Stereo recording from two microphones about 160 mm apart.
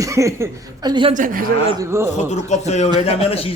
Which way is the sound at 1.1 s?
60° right (ahead or behind).